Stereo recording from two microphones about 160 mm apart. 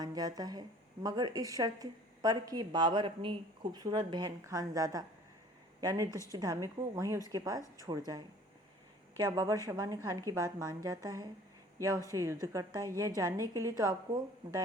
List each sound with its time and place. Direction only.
0.0 s a woman's voice: 25° right (ahead or behind)
6.1 s speech: 20° left (ahead or behind)
6.3 s a woman's voice: 25° right (ahead or behind)